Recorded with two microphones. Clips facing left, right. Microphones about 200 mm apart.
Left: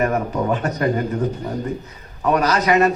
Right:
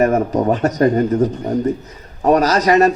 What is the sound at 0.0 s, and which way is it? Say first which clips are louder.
A man's voice: right 5 dB; 40° right (ahead or behind).